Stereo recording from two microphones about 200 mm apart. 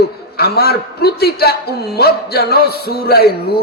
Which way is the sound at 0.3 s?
50° left (ahead or behind).